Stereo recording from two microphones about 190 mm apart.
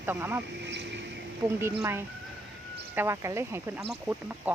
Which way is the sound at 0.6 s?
65° right (ahead or behind).